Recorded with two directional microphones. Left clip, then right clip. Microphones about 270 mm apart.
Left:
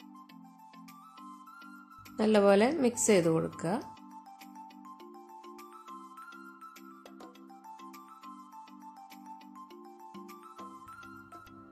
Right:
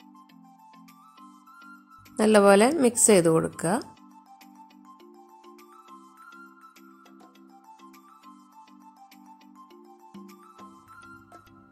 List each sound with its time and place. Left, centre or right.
2.1 s a woman's voice: centre
10.1 s music: centre